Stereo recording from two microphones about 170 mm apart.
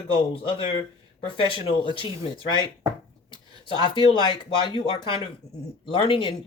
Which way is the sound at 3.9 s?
30° left (ahead or behind).